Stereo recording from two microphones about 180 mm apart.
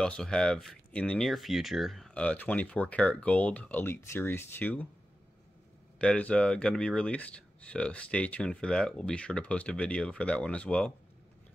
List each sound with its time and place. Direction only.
0.0 s speech: 5° left (ahead or behind)
5.9 s speech: 5° left (ahead or behind)